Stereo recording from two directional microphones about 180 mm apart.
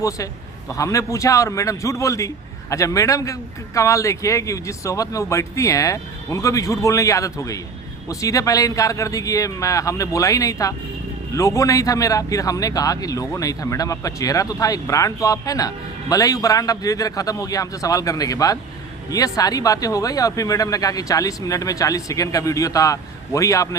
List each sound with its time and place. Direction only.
0.7 s a man's voice: 15° left (ahead or behind)